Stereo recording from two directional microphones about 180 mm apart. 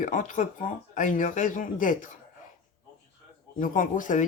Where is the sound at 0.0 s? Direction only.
45° left (ahead or behind).